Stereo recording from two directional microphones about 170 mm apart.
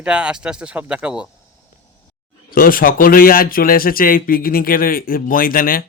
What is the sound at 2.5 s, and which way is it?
Speech, 55° left (ahead or behind).